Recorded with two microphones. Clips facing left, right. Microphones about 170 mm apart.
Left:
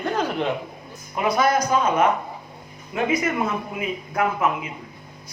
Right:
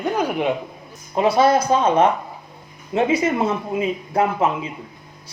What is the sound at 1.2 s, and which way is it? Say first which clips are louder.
Speech: right 5 dB; 30° right (ahead or behind).